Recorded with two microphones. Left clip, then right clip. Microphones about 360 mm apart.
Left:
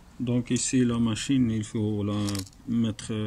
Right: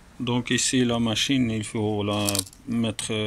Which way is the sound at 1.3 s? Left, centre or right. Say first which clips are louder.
Right 2 dB; right.